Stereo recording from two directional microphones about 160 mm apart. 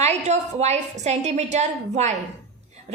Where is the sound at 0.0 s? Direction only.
45° right (ahead or behind).